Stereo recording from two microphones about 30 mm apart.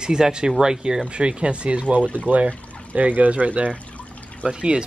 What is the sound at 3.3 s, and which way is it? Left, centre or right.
Speech, right.